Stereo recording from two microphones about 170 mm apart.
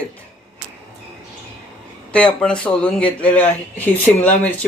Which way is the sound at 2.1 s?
5° left (ahead or behind).